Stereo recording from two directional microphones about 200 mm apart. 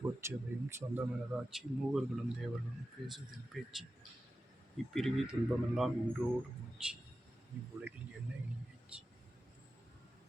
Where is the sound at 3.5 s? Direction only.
Centre (ahead or behind).